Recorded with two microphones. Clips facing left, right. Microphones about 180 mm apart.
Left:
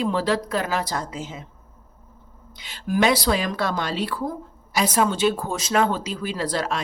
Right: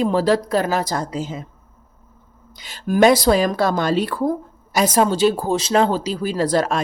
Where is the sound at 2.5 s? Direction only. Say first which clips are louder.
Right 4 dB; 40° right (ahead or behind).